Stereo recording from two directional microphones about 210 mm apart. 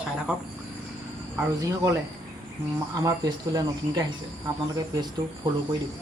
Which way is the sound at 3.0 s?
15° right (ahead or behind).